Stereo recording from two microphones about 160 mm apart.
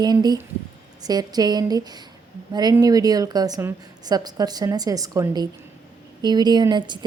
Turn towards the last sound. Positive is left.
turn(degrees=-30)  # may be behind; listen again after turning